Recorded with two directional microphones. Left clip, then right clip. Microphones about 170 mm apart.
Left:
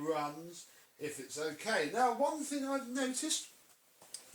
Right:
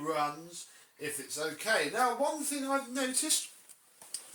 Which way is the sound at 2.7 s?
Centre (ahead or behind).